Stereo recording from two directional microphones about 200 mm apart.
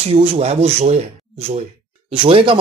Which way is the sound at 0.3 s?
30° right (ahead or behind).